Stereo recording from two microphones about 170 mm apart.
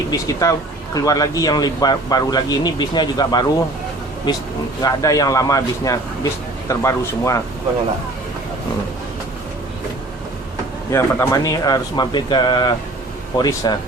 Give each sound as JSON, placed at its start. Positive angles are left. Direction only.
{"t": 0.3, "sound": "a man's voice", "side_deg": 20}
{"t": 4.8, "sound": "a man's voice", "side_deg": 20}
{"t": 10.9, "sound": "a man's voice", "side_deg": 20}